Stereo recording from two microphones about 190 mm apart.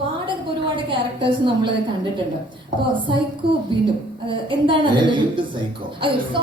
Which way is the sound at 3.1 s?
25° right (ahead or behind).